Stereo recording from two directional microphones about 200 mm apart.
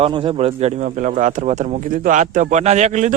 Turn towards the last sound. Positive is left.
turn(degrees=-35)  # may be behind; listen again after turning